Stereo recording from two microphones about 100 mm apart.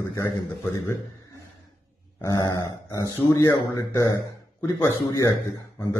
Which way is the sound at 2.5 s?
30° left (ahead or behind).